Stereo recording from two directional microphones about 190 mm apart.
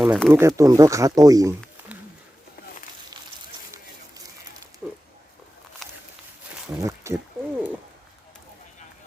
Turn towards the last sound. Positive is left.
turn(degrees=-15)  # may be behind; listen again after turning